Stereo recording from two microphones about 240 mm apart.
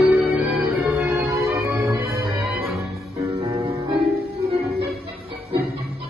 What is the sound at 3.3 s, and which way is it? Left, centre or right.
Music, right.